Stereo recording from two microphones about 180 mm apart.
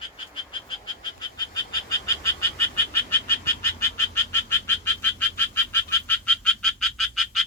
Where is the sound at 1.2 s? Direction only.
20° left (ahead or behind).